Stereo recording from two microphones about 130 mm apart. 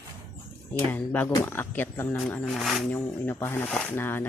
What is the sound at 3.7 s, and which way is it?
Speech, 5° left (ahead or behind).